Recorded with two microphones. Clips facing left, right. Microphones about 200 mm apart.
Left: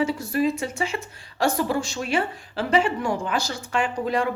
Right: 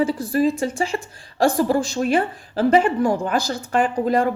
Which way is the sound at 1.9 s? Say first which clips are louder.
Right 5 dB; 45° right (ahead or behind).